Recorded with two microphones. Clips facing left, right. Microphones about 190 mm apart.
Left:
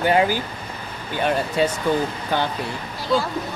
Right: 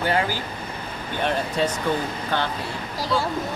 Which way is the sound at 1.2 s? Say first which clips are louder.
Left 3 dB; 5° left (ahead or behind).